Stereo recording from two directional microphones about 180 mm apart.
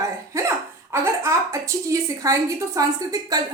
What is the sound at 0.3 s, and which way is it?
Cough, 15° right (ahead or behind).